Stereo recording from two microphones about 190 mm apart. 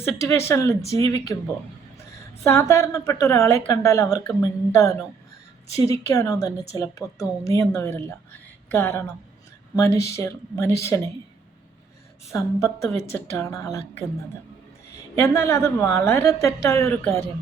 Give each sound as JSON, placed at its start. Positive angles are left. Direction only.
{"t": 0.0, "sound": "a woman's voice", "side_deg": 15}
{"t": 2.4, "sound": "a woman's voice", "side_deg": 15}
{"t": 6.1, "sound": "a woman's voice", "side_deg": 20}
{"t": 12.3, "sound": "a woman's voice", "side_deg": 15}